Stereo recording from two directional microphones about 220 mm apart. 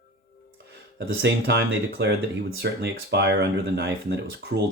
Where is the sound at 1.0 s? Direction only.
50° right (ahead or behind).